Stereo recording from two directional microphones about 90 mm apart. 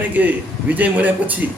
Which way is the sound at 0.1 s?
20° right (ahead or behind).